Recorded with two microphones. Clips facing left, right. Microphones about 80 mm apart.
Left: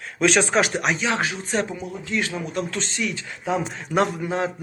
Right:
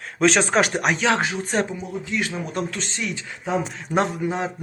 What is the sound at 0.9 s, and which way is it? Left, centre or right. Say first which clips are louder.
Speech: right 4 dB; right.